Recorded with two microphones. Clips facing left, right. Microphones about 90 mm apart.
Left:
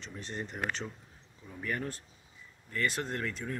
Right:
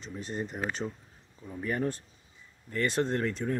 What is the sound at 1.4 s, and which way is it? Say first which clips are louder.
Speech: right 5 dB; 20° right (ahead or behind).